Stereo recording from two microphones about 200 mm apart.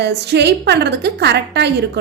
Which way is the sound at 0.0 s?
55° right (ahead or behind).